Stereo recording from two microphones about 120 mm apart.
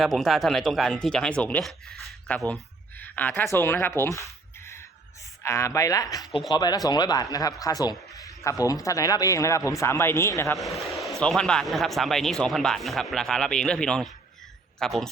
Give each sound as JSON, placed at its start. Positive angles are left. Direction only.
{"t": 0.0, "sound": "speech", "side_deg": 0}
{"t": 5.4, "sound": "speech", "side_deg": 25}
{"t": 10.6, "sound": "speech", "side_deg": 0}